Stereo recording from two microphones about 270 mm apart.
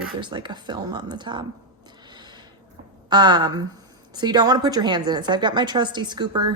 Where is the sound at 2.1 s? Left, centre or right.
Centre.